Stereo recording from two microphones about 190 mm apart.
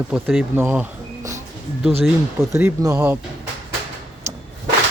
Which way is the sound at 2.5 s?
15° right (ahead or behind).